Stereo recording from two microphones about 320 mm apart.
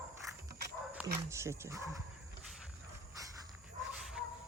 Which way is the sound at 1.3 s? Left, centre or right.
Centre.